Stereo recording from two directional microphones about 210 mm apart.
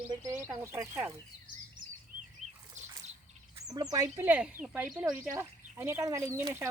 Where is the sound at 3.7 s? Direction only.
15° right (ahead or behind).